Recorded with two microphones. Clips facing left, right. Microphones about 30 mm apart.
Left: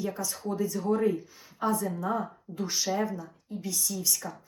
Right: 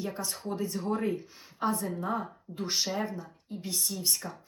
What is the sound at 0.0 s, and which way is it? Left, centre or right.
Speech, right.